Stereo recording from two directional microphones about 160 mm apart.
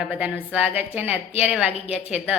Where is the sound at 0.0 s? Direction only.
5° right (ahead or behind).